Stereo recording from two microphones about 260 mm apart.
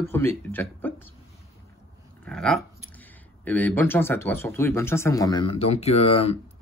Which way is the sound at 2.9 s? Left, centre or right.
Centre.